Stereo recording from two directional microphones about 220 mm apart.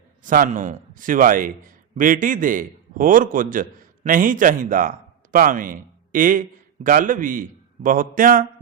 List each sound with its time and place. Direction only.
0.3 s a man's voice: 35° right (ahead or behind)